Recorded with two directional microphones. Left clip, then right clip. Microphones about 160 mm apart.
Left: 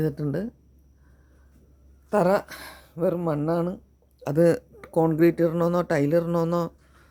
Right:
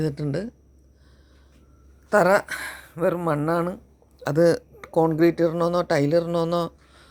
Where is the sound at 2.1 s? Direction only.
5° left (ahead or behind).